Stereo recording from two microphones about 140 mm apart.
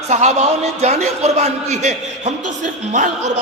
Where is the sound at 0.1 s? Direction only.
55° right (ahead or behind).